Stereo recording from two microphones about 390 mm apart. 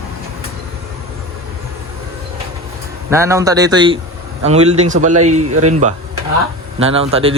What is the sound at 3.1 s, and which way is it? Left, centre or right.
A man's voice, centre.